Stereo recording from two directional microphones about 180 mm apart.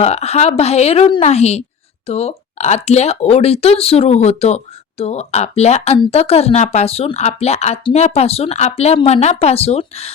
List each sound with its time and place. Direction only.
0.0 s speech: 35° left (ahead or behind)